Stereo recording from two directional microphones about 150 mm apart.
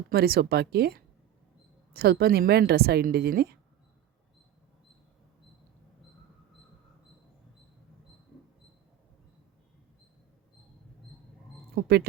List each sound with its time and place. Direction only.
0.1 s a woman's voice: 90° right
11.7 s speech: 90° right